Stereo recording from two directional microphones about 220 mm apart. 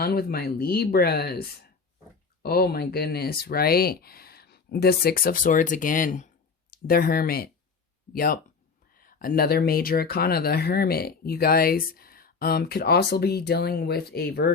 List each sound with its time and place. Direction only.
0.0 s speech: 45° left (ahead or behind)